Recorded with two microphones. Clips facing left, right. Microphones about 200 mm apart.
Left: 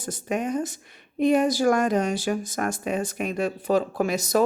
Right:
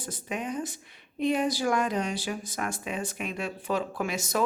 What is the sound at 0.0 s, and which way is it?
A woman's voice, 45° left (ahead or behind).